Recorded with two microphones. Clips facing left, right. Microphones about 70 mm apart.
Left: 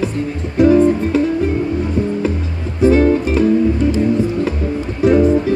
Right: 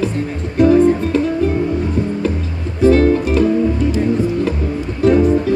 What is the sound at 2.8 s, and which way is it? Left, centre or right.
Music, centre.